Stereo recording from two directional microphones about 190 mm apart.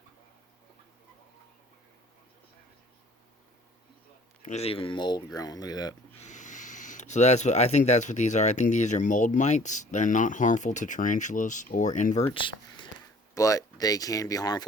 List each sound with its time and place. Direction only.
4.4 s speech: 35° left (ahead or behind)
6.2 s speech: 40° left (ahead or behind)
12.3 s speech: 25° left (ahead or behind)